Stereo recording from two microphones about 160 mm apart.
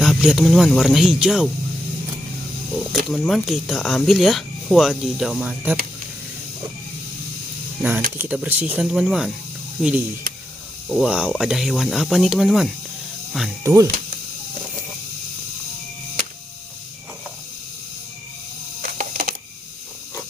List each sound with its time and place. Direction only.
0.2 s speech: 5° right (ahead or behind)
3.1 s speech: centre (ahead or behind)
7.8 s speech: 10° right (ahead or behind)
13.7 s speech: 15° right (ahead or behind)
18.8 s a sound: 55° right (ahead or behind)